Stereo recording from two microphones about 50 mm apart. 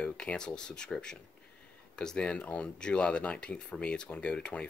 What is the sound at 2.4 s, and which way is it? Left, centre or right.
Speech, left.